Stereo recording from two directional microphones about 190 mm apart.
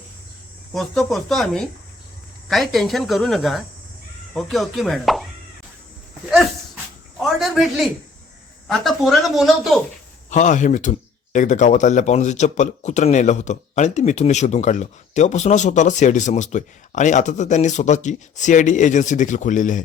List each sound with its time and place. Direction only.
0.7 s speech: centre (ahead or behind)
7.2 s a sound: centre (ahead or behind)
8.6 s speech: centre (ahead or behind)
10.2 s speech: 40° left (ahead or behind)